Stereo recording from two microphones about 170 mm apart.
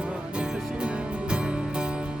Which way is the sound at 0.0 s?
5° right (ahead or behind).